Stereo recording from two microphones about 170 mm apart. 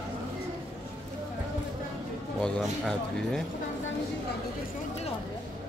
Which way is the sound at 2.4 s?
Centre (ahead or behind).